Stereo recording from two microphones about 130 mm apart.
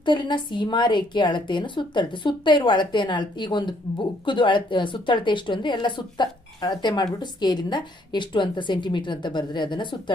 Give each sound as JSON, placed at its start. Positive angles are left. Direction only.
{"t": 0.0, "sound": "a woman's voice", "side_deg": 35}